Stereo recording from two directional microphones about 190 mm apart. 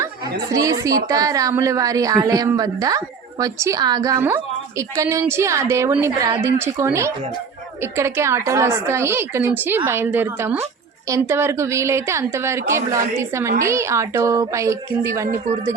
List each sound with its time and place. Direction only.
0.5 s a woman's voice: 20° right (ahead or behind)